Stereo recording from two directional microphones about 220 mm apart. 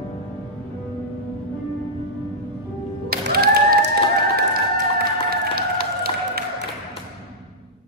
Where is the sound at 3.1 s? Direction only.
45° right (ahead or behind).